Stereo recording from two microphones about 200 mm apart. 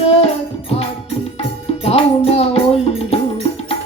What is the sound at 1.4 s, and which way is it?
Tabla, 30° left (ahead or behind).